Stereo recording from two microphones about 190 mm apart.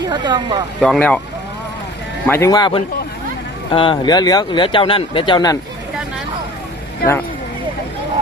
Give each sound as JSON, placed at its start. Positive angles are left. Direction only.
{"t": 0.0, "sound": "speech", "side_deg": -25}
{"t": 0.8, "sound": "speech", "side_deg": 5}
{"t": 2.2, "sound": "speech", "side_deg": 15}